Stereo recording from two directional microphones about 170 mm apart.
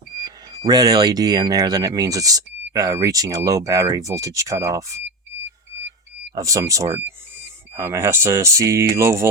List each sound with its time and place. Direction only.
0.2 s speech: 25° right (ahead or behind)
6.3 s speech: 20° right (ahead or behind)